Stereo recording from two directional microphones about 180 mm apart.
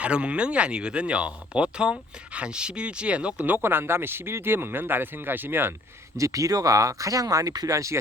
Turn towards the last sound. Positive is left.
turn(degrees=-15)  # may be behind; listen again after turning